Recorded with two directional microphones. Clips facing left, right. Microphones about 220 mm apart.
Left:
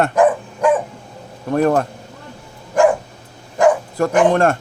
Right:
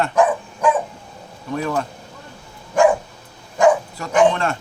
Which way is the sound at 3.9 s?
50° left (ahead or behind).